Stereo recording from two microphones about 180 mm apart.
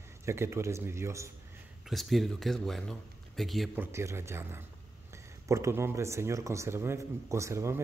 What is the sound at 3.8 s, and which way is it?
Speech, 15° right (ahead or behind).